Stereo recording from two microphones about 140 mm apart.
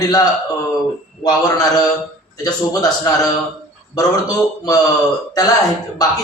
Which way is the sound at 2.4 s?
30° left (ahead or behind).